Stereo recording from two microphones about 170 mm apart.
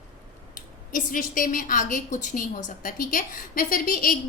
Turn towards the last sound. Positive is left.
turn(degrees=55)  # may be behind; listen again after turning